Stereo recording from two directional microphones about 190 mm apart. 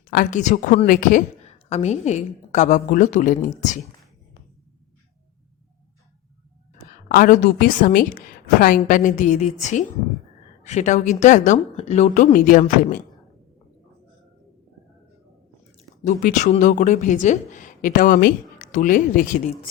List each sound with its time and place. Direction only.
0.1 s a woman's voice: 45° left (ahead or behind)
7.1 s a woman's voice: 45° left (ahead or behind)
16.2 s a woman's voice: 40° left (ahead or behind)